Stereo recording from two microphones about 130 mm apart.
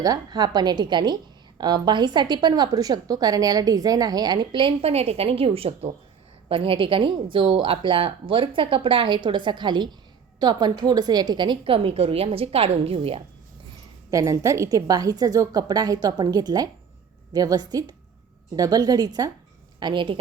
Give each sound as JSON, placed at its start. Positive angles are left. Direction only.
{"t": 0.0, "sound": "a woman's voice", "side_deg": -30}
{"t": 14.1, "sound": "a woman's voice", "side_deg": -25}